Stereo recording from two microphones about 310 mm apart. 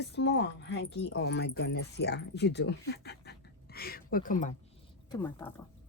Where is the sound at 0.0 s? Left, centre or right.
Left.